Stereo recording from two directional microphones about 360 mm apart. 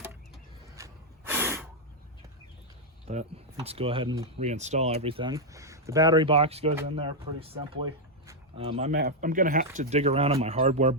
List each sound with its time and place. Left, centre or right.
0.8 s gasp: centre
3.1 s speech: centre
8.3 s a sound: centre
9.0 s speech: right